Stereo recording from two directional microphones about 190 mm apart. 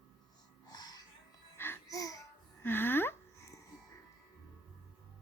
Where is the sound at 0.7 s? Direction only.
20° left (ahead or behind).